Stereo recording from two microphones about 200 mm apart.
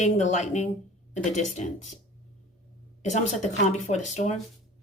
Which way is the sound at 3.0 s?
35° left (ahead or behind).